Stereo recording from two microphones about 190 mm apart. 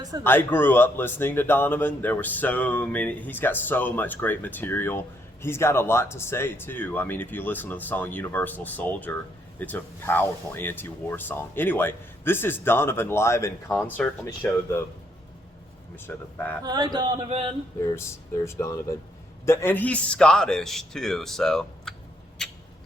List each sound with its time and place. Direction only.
0.3 s a man's voice: 10° left (ahead or behind)
16.0 s a man's voice: 10° left (ahead or behind)
16.6 s speech: 20° right (ahead or behind)
17.8 s a man's voice: 15° left (ahead or behind)
22.4 s rodents: centre (ahead or behind)